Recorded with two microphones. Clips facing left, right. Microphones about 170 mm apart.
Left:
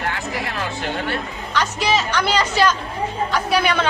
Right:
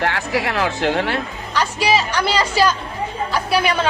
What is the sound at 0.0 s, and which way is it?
Speech, 80° right.